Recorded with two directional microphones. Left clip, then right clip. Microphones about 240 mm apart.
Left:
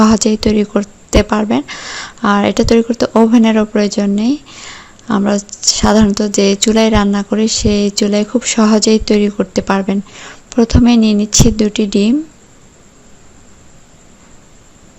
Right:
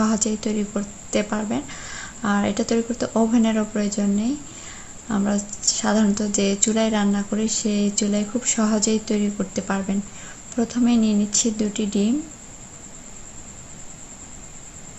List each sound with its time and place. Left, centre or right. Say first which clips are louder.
0.0 s a woman's voice: left 12 dB; left